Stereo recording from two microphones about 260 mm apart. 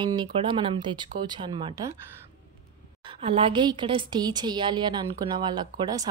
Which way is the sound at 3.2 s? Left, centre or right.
Right.